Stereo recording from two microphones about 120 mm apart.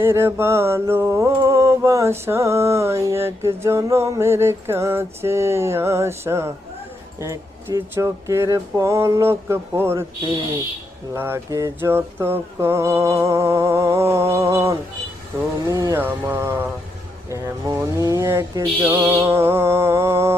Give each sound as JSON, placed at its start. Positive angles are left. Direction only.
{"t": 0.0, "sound": "mantra", "side_deg": -20}
{"t": 11.1, "sound": "mantra", "side_deg": -20}
{"t": 15.6, "sound": "mantra", "side_deg": -30}
{"t": 16.0, "sound": "mantra", "side_deg": -20}